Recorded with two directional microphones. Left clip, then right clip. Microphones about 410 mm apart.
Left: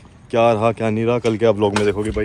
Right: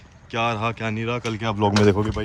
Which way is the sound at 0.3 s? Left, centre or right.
Centre.